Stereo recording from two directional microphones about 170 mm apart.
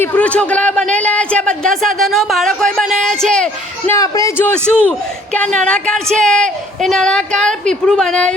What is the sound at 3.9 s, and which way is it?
A man's voice, 20° left (ahead or behind).